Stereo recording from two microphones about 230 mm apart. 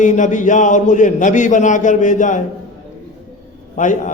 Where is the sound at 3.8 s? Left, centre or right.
Left.